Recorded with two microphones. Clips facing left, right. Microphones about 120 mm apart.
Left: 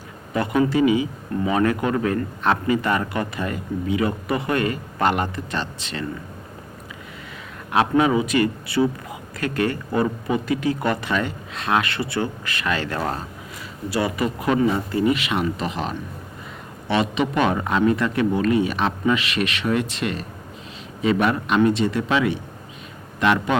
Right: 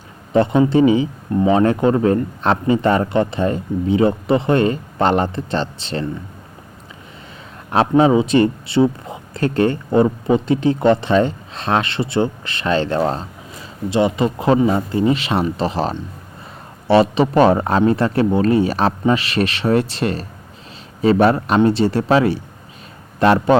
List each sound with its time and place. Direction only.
0.3 s a man's voice: 25° right (ahead or behind)
7.7 s a man's voice: 30° right (ahead or behind)